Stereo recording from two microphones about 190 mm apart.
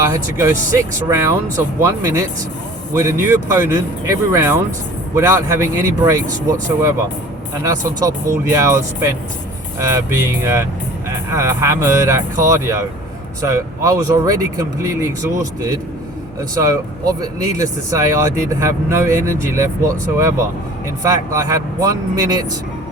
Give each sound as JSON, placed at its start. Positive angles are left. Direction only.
{"t": 0.0, "sound": "speech", "side_deg": -15}
{"t": 7.6, "sound": "speech", "side_deg": -15}